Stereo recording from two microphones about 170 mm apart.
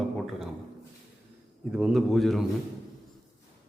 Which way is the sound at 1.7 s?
5° right (ahead or behind).